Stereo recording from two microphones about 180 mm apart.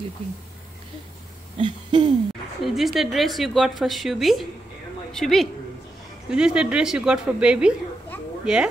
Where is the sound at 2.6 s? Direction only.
Centre (ahead or behind).